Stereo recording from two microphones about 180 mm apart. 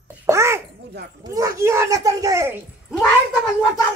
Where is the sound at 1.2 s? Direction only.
20° right (ahead or behind).